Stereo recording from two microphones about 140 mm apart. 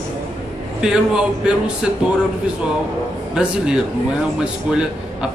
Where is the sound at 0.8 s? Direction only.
5° right (ahead or behind).